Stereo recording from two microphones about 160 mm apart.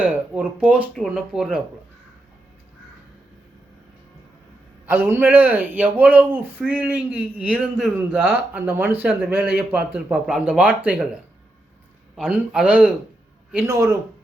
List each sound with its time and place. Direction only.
0.0 s speech: 10° right (ahead or behind)
0.9 s a man's voice: centre (ahead or behind)
4.9 s a man's voice: 15° right (ahead or behind)
12.1 s a man's voice: 5° right (ahead or behind)
13.7 s a man's voice: 15° right (ahead or behind)